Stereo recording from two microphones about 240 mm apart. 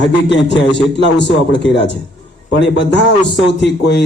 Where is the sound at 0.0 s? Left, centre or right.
Left.